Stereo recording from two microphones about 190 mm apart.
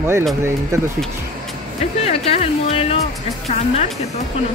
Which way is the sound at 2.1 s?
35° left (ahead or behind).